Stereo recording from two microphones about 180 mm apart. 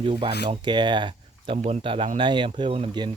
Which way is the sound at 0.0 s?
30° right (ahead or behind).